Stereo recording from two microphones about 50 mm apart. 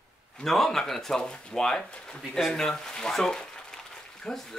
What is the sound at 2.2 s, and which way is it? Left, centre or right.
Speech, centre.